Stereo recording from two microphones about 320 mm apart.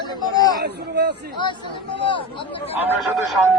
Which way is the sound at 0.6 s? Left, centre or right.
Right.